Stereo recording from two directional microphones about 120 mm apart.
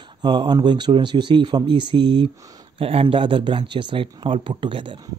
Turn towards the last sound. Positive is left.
turn(degrees=-45)  # may be behind; listen again after turning